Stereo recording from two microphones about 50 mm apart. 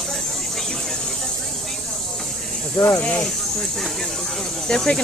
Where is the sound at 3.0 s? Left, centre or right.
Left.